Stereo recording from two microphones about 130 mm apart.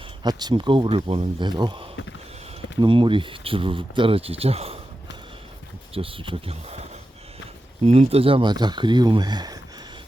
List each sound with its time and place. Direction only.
0.2 s speech: 30° right (ahead or behind); by 4.8 s 50° right (ahead or behind)
5.9 s speech: 45° right (ahead or behind)
7.9 s speech: 50° right (ahead or behind); by 9.6 s 30° right (ahead or behind)